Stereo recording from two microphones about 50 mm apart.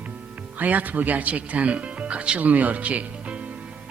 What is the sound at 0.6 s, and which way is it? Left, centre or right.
Speech, right.